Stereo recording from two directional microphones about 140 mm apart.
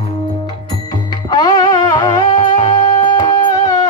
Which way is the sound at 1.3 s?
30° left (ahead or behind).